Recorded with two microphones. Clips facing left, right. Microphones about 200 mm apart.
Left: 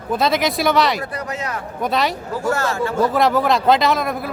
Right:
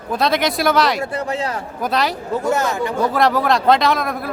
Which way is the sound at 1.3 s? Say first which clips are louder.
Right 4 dB; 30° right (ahead or behind).